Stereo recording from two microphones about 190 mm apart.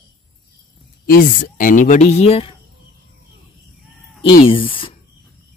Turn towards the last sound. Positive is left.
turn(degrees=25)  # may be behind; listen again after turning